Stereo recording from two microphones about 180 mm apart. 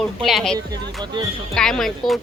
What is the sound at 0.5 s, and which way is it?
Speech, 25° right (ahead or behind).